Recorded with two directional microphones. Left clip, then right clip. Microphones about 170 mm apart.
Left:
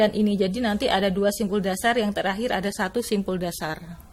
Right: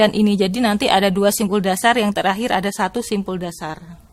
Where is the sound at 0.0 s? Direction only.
30° right (ahead or behind); by 3.8 s 10° right (ahead or behind).